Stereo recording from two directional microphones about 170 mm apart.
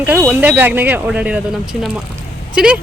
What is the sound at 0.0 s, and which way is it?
Speech, 10° right (ahead or behind).